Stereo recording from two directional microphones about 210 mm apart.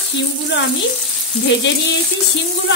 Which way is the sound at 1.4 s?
60° left (ahead or behind).